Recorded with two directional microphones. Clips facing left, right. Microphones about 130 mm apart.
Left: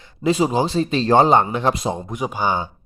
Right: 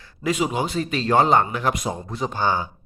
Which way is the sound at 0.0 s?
25° left (ahead or behind).